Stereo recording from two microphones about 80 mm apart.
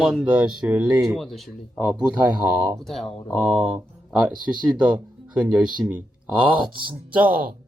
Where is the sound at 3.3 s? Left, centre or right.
Centre.